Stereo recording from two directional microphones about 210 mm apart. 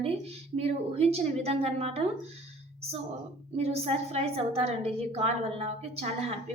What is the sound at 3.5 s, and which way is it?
A woman's voice, 30° right (ahead or behind).